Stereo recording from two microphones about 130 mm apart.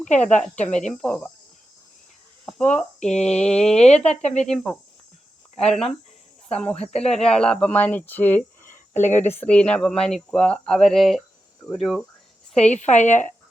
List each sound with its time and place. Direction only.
0.3 s speech: 65° left (ahead or behind)
1.0 s speech: 10° left (ahead or behind)
2.5 s speech: 5° left (ahead or behind)
3.8 s speech: 55° left (ahead or behind)
4.4 s speech: 5° left (ahead or behind)
6.7 s speech: 55° left (ahead or behind)
7.0 s speech: 5° left (ahead or behind)
8.7 s a sound: 70° left (ahead or behind)
9.4 s speech: 10° left (ahead or behind)
12.7 s speech: 65° left (ahead or behind)